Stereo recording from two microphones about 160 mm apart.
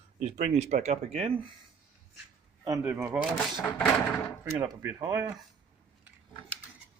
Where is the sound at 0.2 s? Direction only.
45° right (ahead or behind).